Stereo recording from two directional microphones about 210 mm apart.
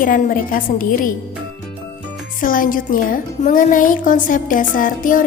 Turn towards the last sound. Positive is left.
turn(degrees=40)  # may be behind; listen again after turning